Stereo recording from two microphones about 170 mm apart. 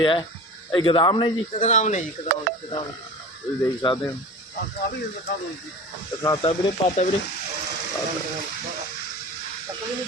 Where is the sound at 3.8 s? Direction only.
25° left (ahead or behind).